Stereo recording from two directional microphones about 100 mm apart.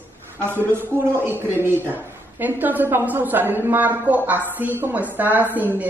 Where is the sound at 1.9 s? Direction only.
20° right (ahead or behind).